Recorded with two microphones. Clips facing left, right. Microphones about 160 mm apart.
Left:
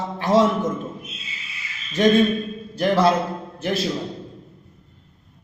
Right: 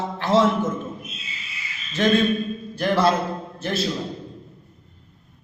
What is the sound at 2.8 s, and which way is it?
A man's voice, 15° left (ahead or behind).